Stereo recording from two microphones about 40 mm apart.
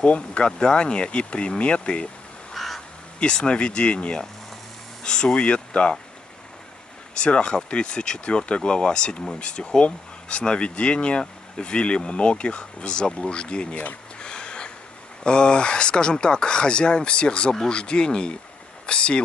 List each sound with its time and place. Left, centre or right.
0.0 s speech: left
2.5 s crow: centre
3.2 s speech: left
7.2 s speech: left
14.2 s a sound: left
15.2 s speech: left